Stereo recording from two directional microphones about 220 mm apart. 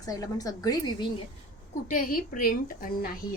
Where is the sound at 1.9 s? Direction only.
40° left (ahead or behind).